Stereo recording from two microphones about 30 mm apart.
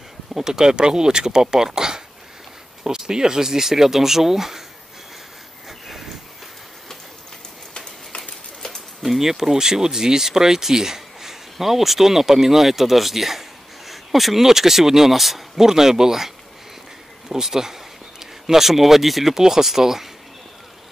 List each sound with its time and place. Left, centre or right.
0.3 s speech: centre
5.7 s a sound: centre
7.7 s a sound: left
9.0 s speech: centre
15.6 s speech: centre
19.3 s speech: centre